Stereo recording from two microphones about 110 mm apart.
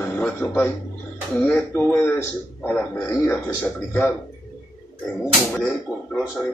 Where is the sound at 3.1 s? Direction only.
25° left (ahead or behind).